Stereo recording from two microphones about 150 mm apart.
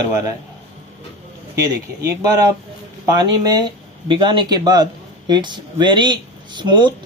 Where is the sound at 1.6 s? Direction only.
25° right (ahead or behind).